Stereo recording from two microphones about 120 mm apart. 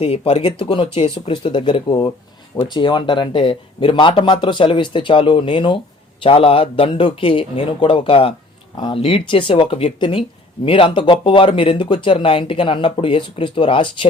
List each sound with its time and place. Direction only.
0.0 s speech: 55° left (ahead or behind)